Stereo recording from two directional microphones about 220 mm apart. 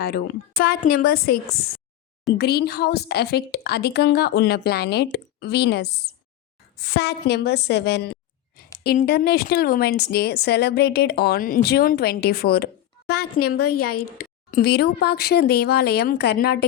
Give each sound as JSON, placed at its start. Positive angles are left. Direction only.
{"t": 0.0, "sound": "a woman's voice", "side_deg": 45}
{"t": 6.9, "sound": "a woman's voice", "side_deg": 50}
{"t": 13.7, "sound": "a woman's voice", "side_deg": 90}
{"t": 14.2, "sound": "a woman's voice", "side_deg": 45}